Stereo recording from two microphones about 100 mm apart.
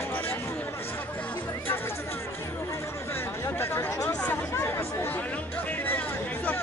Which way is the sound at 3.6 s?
35° left (ahead or behind).